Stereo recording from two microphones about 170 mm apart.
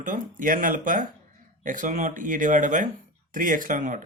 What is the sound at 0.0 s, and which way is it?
Speech, 50° right (ahead or behind).